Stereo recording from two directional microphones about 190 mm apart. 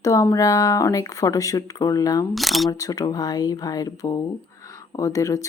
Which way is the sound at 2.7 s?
20° left (ahead or behind).